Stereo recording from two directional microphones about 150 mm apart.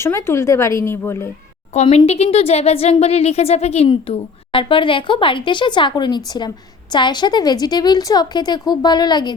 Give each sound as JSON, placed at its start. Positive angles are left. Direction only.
{"t": 0.0, "sound": "speech", "side_deg": 15}
{"t": 1.7, "sound": "a woman's voice", "side_deg": 50}